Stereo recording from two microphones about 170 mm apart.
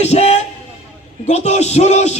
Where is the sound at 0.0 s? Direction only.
40° left (ahead or behind).